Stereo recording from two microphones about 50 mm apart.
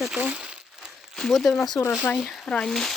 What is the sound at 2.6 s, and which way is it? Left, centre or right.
Speech, centre.